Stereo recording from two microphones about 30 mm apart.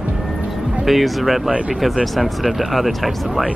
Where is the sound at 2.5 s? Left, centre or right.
Centre.